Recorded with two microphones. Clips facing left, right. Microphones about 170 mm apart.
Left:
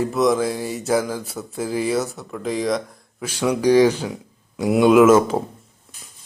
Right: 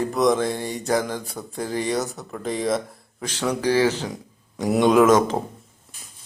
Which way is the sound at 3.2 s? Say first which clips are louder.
Left 5 dB; 10° left (ahead or behind).